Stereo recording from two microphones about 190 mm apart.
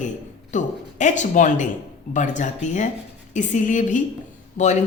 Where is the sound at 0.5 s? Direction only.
40° left (ahead or behind).